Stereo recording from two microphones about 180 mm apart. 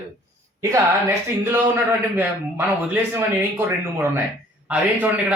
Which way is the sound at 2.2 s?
10° right (ahead or behind).